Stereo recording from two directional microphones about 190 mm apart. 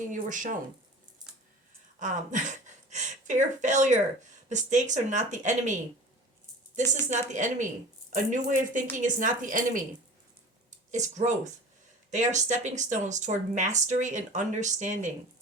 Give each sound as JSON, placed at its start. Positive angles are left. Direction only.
{"t": 0.1, "sound": "a woman's voice", "side_deg": -45}
{"t": 2.0, "sound": "a woman's voice", "side_deg": -40}
{"t": 7.1, "sound": "a woman's voice", "side_deg": -40}